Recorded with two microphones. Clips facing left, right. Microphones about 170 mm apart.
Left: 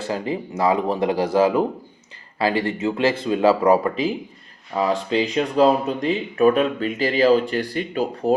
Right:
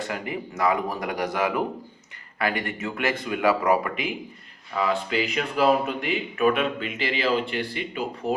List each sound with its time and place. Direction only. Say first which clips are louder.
0.1 s speech: left 6 dB; 25° left (ahead or behind)